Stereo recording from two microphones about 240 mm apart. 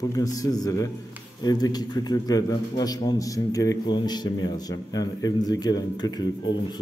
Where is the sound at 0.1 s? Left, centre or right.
Centre.